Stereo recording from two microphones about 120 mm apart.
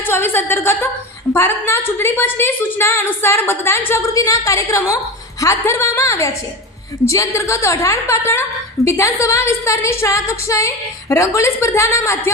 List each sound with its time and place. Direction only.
0.1 s a woman's voice: 20° left (ahead or behind)